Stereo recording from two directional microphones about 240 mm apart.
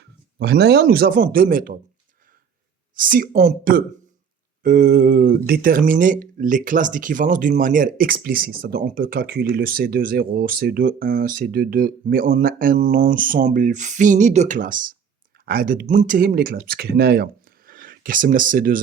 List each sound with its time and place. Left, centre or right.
0.3 s speech: right
2.9 s speech: right